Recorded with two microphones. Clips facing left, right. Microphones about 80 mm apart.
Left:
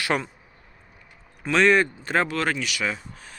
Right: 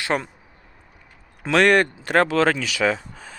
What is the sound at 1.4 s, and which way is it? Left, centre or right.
Speech, right.